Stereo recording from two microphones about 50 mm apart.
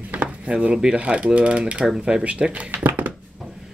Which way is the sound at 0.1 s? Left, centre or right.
Right.